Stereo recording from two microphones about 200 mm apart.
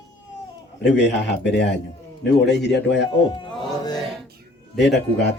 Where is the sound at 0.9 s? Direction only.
60° left (ahead or behind).